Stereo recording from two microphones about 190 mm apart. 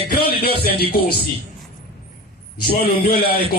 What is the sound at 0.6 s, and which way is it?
Music, 55° left (ahead or behind).